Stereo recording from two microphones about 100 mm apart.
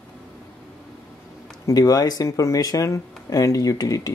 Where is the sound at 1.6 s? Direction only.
40° left (ahead or behind).